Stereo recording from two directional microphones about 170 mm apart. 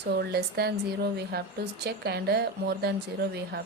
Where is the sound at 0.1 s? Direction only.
70° right (ahead or behind).